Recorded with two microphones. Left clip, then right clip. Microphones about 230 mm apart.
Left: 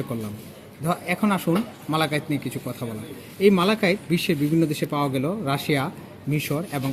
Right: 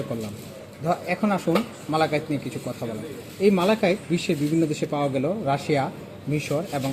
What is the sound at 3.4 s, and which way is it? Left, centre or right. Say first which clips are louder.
Speech: left 1 dB; left.